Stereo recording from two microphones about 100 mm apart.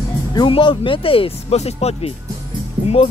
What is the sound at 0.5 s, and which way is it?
Speech, 55° left (ahead or behind).